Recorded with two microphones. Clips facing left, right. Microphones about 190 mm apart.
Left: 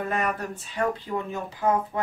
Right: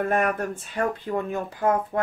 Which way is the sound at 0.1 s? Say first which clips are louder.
Right 4 dB; 50° right (ahead or behind).